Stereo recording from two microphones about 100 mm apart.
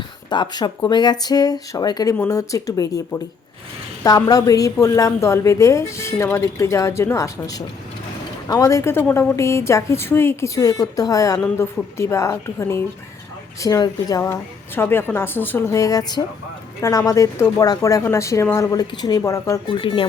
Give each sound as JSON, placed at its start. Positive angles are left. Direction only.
{"t": 0.3, "sound": "a woman's voice", "side_deg": 50}
{"t": 13.6, "sound": "a woman's voice", "side_deg": 35}
{"t": 14.8, "sound": "a woman's voice", "side_deg": 25}
{"t": 19.7, "sound": "speech", "side_deg": 60}